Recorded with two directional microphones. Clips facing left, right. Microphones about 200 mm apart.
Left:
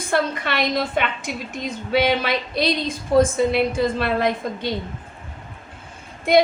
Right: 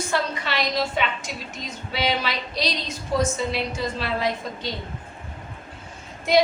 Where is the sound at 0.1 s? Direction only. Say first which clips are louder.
Left 7 dB; 55° left (ahead or behind).